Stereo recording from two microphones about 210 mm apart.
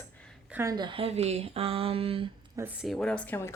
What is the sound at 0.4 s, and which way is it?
Speech, 10° right (ahead or behind).